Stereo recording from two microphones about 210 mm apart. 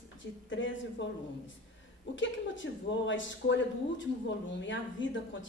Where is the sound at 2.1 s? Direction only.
60° left (ahead or behind).